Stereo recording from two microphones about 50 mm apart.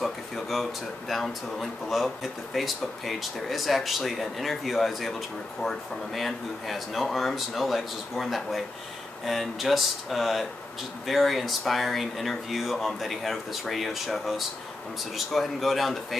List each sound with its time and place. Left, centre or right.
0.0 s speech: centre